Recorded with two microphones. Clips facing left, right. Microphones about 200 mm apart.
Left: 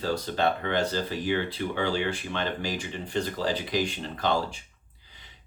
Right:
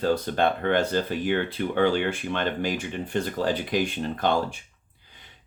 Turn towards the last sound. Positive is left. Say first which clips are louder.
# right 3 dB
turn(degrees=-55)  # may be behind; listen again after turning